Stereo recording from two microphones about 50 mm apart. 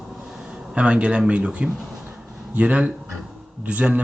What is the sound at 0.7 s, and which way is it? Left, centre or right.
Speech, right.